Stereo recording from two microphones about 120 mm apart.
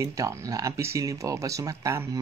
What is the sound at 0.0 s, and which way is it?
Speech, 25° right (ahead or behind).